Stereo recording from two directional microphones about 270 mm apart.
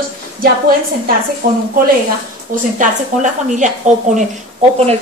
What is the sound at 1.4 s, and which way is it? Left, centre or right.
Speech, right.